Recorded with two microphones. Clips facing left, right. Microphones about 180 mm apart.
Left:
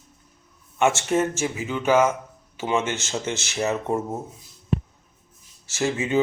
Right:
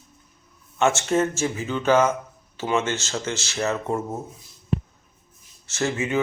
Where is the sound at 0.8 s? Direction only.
10° left (ahead or behind).